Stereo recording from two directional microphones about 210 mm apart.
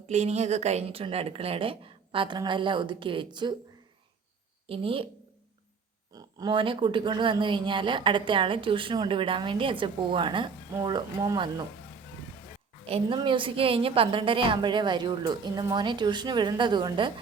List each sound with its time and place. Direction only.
0.1 s speech: 30° right (ahead or behind)
4.6 s speech: 25° right (ahead or behind)
6.1 s speech: 20° right (ahead or behind)
12.8 s speech: 25° right (ahead or behind)